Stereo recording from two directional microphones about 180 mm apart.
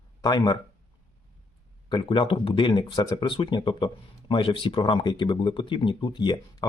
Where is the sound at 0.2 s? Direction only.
25° left (ahead or behind).